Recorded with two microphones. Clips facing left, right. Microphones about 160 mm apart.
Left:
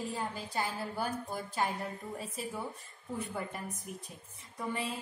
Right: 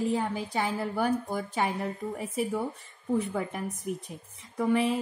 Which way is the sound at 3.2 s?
80° right.